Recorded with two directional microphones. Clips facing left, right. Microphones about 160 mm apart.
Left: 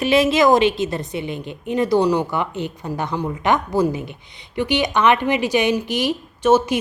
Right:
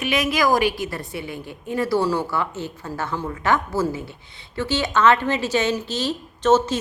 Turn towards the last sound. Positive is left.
turn(degrees=10)  # may be behind; listen again after turning